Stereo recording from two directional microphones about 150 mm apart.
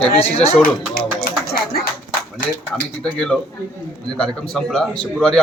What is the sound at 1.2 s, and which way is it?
Speech, 85° left.